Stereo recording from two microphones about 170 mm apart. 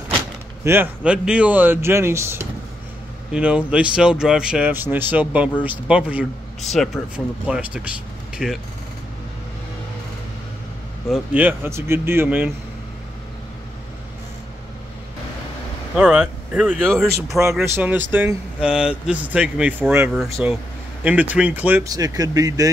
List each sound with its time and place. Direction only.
0.7 s speech: 10° right (ahead or behind)
11.1 s speech: 10° right (ahead or behind)
16.0 s speech: 5° right (ahead or behind)
17.7 s speech: 10° right (ahead or behind)
21.8 s speech: 20° right (ahead or behind)